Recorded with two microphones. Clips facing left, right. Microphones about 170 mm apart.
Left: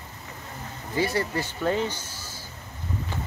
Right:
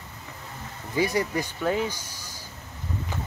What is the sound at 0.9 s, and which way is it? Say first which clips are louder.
Speech: right 1 dB; 15° right (ahead or behind).